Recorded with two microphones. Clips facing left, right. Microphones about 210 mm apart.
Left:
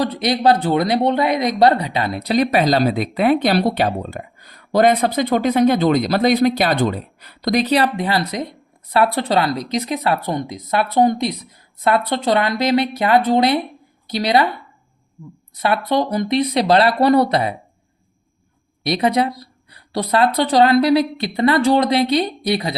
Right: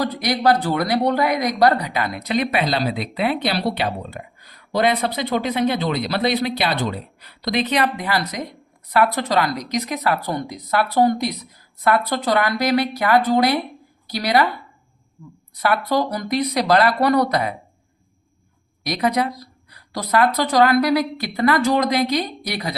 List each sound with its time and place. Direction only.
0.0 s speech: 25° left (ahead or behind)
15.9 s speech: 25° left (ahead or behind)
18.9 s speech: 30° left (ahead or behind)